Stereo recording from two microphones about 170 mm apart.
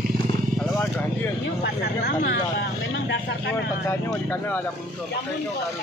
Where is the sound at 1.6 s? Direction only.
75° left (ahead or behind); by 3.5 s 90° left.